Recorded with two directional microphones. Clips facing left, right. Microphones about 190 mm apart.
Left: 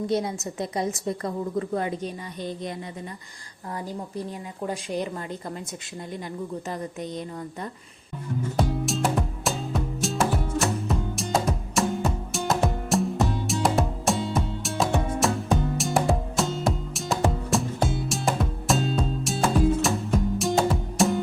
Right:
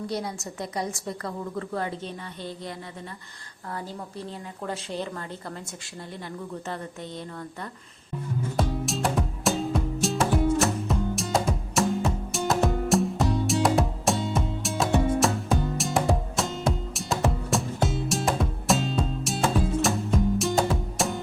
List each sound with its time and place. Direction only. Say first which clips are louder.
0.1 s a woman's voice: left 5 dB; 20° left (ahead or behind)
3.8 s a woman's voice: left 4 dB; 15° left (ahead or behind)
6.7 s a woman's voice: left 3 dB; 15° left (ahead or behind)
8.5 s music: left 2 dB; centre (ahead or behind)